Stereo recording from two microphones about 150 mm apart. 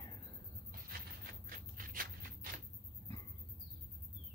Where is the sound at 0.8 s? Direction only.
75° right (ahead or behind).